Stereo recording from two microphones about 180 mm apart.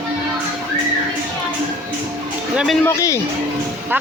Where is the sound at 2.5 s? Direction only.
5° right (ahead or behind).